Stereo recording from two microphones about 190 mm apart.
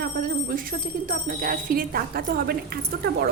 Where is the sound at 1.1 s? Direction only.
45° right (ahead or behind).